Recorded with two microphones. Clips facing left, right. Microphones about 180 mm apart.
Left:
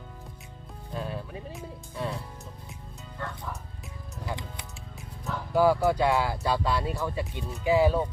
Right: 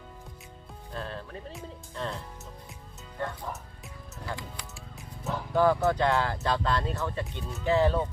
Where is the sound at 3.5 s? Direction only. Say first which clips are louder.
Right 1 dB; 20° right (ahead or behind).